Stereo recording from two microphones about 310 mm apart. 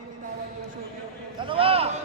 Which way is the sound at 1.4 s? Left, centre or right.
Centre.